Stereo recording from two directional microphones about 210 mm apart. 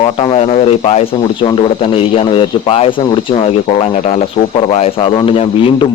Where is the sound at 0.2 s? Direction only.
25° left (ahead or behind).